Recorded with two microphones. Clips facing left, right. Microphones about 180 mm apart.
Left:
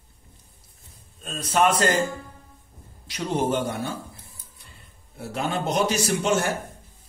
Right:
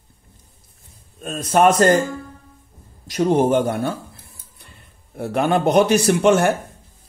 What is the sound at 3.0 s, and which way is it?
A man's voice, 50° right (ahead or behind).